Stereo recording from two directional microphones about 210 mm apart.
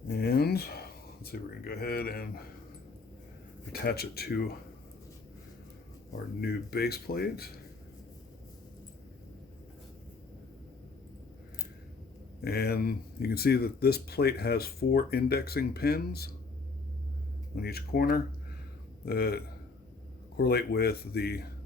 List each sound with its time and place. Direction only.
0.1 s a sound: 50° left (ahead or behind)
3.7 s speech: 50° left (ahead or behind)
6.4 s speech: 50° left (ahead or behind)
12.4 s speech: 50° left (ahead or behind)
17.6 s speech: 45° left (ahead or behind)